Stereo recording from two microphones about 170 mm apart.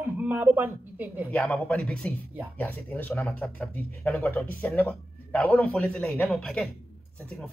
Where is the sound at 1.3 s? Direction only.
5° left (ahead or behind).